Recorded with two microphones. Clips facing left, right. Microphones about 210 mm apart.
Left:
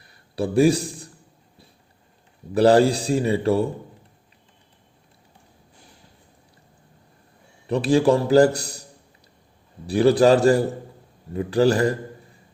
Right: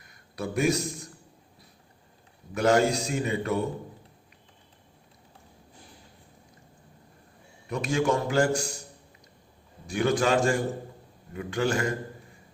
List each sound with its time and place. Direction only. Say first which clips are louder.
0.0 s a sound: left 8 dB; 30° left (ahead or behind)
2.6 s a man's voice: left 7 dB; 35° left (ahead or behind)
7.7 s a man's voice: left 8 dB; 35° left (ahead or behind)
9.8 s a man's voice: left 9 dB; 35° left (ahead or behind)